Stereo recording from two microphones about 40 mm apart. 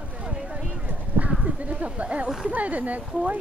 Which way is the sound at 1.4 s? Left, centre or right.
Right.